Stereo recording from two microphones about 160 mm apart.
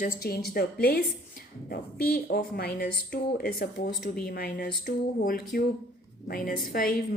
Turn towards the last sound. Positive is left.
turn(degrees=65)  # may be behind; listen again after turning